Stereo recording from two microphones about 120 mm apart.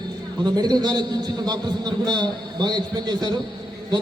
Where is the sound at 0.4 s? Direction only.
35° right (ahead or behind).